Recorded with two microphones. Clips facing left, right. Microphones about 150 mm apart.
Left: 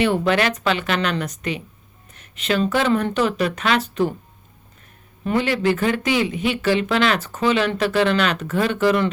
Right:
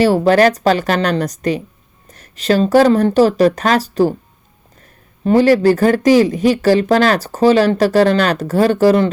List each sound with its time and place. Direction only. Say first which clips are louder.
0.0 s speech: right 8 dB; 35° right (ahead or behind)
5.2 s speech: right 9 dB; 35° right (ahead or behind)